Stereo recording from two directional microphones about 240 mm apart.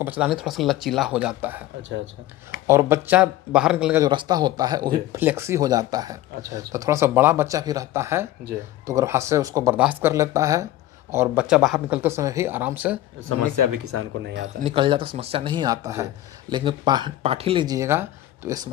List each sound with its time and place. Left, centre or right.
0.0 s speech: centre
2.6 s speech: centre
4.0 s speech: centre
13.9 s speech: right
14.6 s speech: right